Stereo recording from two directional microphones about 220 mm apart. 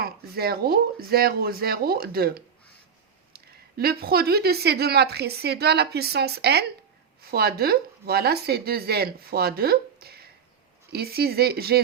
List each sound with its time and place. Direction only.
0.0 s speech: 45° right (ahead or behind)